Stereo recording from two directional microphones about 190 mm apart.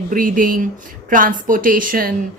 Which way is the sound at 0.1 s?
45° right (ahead or behind).